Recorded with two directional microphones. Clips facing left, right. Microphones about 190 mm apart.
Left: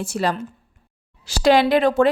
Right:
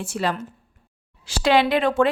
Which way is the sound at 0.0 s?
40° left (ahead or behind).